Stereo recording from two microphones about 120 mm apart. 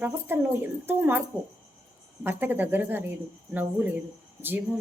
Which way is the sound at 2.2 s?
15° right (ahead or behind).